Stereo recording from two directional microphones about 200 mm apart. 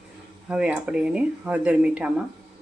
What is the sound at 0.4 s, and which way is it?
Speech, 5° right (ahead or behind).